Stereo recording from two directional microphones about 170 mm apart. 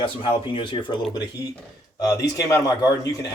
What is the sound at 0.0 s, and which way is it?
Speech, 30° left (ahead or behind).